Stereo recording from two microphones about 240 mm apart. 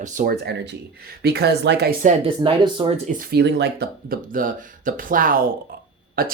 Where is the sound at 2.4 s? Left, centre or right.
Centre.